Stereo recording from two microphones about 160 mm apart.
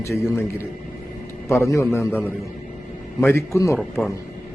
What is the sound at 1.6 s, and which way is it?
Speech, 15° left (ahead or behind).